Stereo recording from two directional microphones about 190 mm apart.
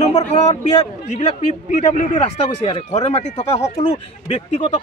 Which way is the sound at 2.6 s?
30° left (ahead or behind).